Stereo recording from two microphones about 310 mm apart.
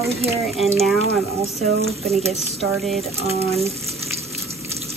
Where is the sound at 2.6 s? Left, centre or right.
Centre.